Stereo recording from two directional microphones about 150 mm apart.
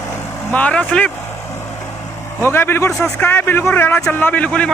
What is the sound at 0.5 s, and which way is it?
Speech, 10° left (ahead or behind).